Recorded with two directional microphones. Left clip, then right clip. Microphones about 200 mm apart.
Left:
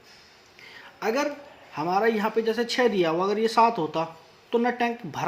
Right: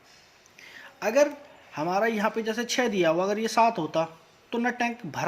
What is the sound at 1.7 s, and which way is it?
Speech, 30° right (ahead or behind).